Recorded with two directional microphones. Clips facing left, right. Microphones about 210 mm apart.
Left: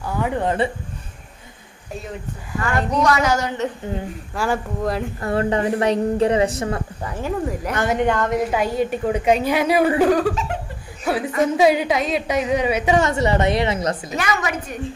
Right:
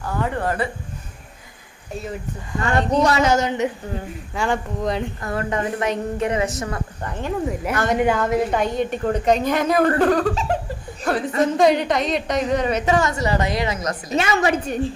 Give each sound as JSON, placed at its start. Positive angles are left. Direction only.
{"t": 0.0, "sound": "a woman's voice", "side_deg": 15}
{"t": 2.6, "sound": "a woman's voice", "side_deg": -30}
{"t": 4.4, "sound": "speech", "side_deg": 5}
{"t": 5.2, "sound": "a woman's voice", "side_deg": 30}
{"t": 7.0, "sound": "a woman's voice", "side_deg": 5}
{"t": 12.9, "sound": "a woman's voice", "side_deg": 30}
{"t": 14.0, "sound": "a woman's voice", "side_deg": -25}